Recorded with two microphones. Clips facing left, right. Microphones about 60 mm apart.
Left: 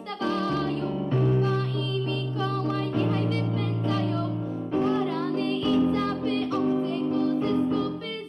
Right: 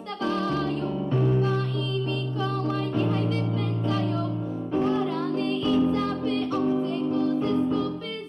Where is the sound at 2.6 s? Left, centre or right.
Left.